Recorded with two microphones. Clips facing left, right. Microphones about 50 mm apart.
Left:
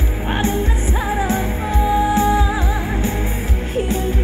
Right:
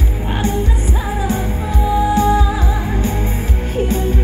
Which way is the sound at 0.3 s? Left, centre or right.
Left.